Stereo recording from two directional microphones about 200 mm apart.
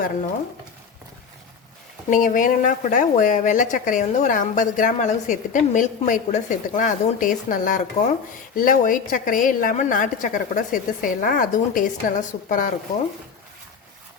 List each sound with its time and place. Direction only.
2.0 s speech: 40° left (ahead or behind)